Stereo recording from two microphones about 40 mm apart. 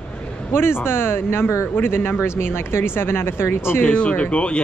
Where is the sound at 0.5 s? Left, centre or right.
Left.